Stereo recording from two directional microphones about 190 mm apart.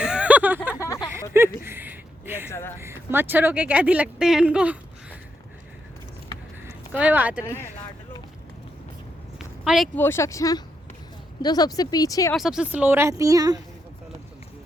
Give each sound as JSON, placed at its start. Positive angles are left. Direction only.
{"t": 0.0, "sound": "a sound", "side_deg": -5}
{"t": 2.5, "sound": "speech", "side_deg": 15}
{"t": 2.8, "sound": "speech", "side_deg": -10}
{"t": 6.7, "sound": "speech", "side_deg": -10}
{"t": 7.4, "sound": "speech", "side_deg": 15}
{"t": 9.6, "sound": "speech", "side_deg": 0}
{"t": 10.0, "sound": "speech", "side_deg": 15}
{"t": 12.3, "sound": "speech", "side_deg": 0}